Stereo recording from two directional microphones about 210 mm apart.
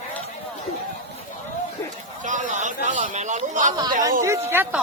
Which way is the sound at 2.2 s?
35° right (ahead or behind).